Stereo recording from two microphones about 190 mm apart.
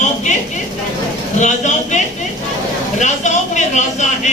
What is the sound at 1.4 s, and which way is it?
Speech, 40° left (ahead or behind).